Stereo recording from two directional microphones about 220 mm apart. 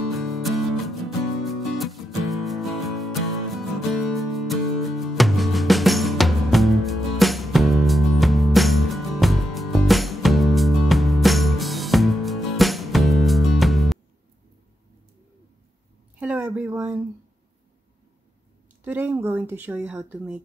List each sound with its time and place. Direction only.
0.0 s music: centre (ahead or behind)
16.2 s a sound: 5° right (ahead or behind)
18.9 s speech: 10° right (ahead or behind)